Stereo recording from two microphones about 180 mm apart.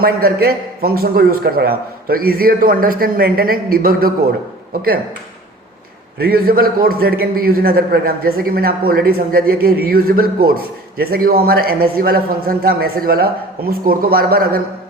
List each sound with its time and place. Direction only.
0.0 s a man's voice: 55° right (ahead or behind)
6.1 s a man's voice: 55° right (ahead or behind)